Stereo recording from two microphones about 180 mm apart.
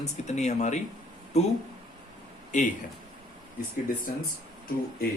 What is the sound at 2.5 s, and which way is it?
Speech, 40° left (ahead or behind).